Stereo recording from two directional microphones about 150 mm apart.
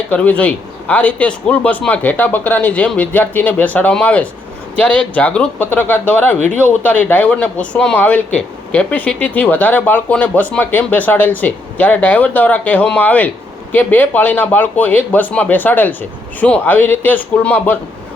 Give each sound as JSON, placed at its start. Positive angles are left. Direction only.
{"t": 0.1, "sound": "speech", "side_deg": 10}